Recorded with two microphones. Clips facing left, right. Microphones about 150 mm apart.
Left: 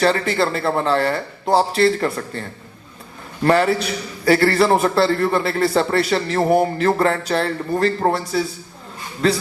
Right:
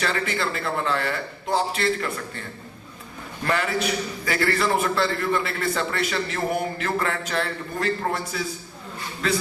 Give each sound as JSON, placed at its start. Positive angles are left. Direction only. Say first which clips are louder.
{"t": 0.0, "sound": "a man's voice", "louder": "left 8 dB", "side_deg": 35}
{"t": 3.4, "sound": "a man's voice", "louder": "left 8 dB", "side_deg": 35}